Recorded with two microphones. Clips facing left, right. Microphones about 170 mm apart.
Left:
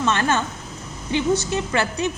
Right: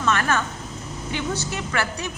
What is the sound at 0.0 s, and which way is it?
A woman's voice, 25° left (ahead or behind).